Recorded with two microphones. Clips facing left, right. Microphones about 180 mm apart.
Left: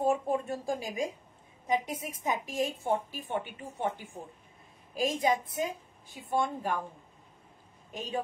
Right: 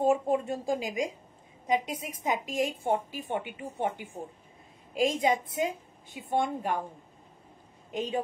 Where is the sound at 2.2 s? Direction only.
15° right (ahead or behind).